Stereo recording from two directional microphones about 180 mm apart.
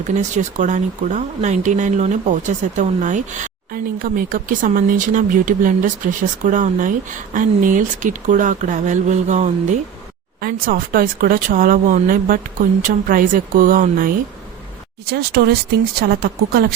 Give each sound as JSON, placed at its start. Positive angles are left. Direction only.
{"t": 0.2, "sound": "speech", "side_deg": -45}
{"t": 10.4, "sound": "speech", "side_deg": -55}
{"t": 15.1, "sound": "a woman's voice", "side_deg": -60}